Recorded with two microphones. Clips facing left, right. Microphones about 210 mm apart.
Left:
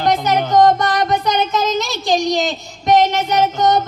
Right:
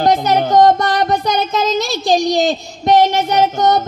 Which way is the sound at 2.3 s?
30° right (ahead or behind).